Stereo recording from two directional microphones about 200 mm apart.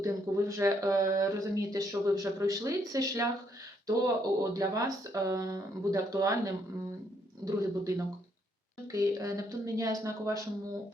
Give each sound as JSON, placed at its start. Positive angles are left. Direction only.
{"t": 0.0, "sound": "speech", "side_deg": -15}